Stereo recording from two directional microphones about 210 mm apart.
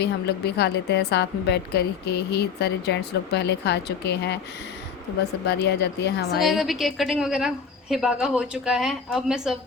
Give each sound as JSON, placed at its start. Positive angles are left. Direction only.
{"t": 0.0, "sound": "a woman's voice", "side_deg": 50}
{"t": 5.5, "sound": "a woman's voice", "side_deg": 55}
{"t": 6.4, "sound": "a woman's voice", "side_deg": 0}